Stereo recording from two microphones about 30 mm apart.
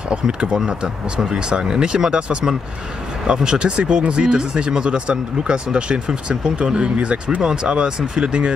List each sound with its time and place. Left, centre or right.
0.1 s speech: right